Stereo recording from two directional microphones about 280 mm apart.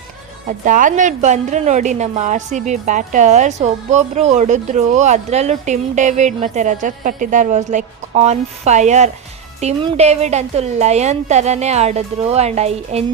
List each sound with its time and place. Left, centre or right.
0.4 s a woman's voice: right